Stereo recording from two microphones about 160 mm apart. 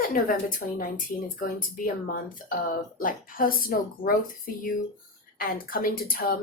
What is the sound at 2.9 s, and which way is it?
Speech, 60° left (ahead or behind).